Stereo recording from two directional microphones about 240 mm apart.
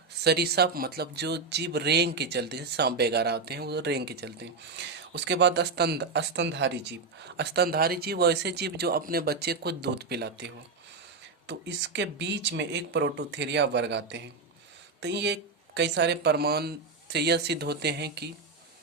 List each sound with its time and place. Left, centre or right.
0.3 s speech: right